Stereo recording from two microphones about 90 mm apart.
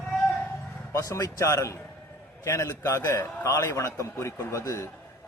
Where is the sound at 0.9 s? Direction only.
35° left (ahead or behind).